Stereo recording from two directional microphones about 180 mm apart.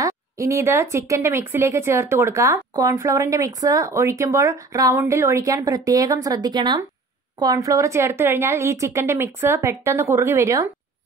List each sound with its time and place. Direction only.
0.0 s speech: 15° right (ahead or behind)